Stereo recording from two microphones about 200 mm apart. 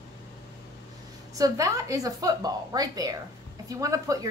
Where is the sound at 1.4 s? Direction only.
15° right (ahead or behind).